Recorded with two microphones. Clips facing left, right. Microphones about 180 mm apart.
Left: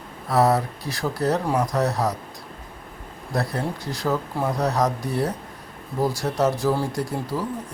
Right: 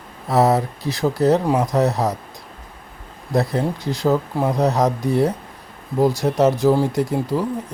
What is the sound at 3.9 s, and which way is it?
Speech, 20° right (ahead or behind).